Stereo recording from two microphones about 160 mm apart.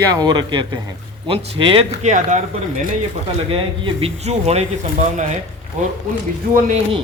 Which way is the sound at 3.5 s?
35° right (ahead or behind).